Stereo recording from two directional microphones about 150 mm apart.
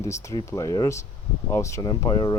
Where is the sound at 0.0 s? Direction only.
20° left (ahead or behind).